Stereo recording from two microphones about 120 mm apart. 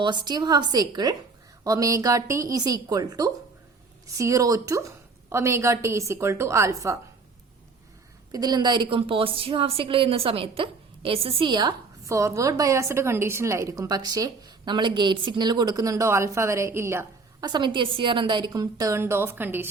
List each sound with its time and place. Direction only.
0.0 s a woman's voice: 40° right (ahead or behind)
8.3 s a woman's voice: 35° right (ahead or behind)
12.0 s a woman's voice: 25° right (ahead or behind)
17.4 s a woman's voice: 40° right (ahead or behind); by 19.6 s 15° right (ahead or behind)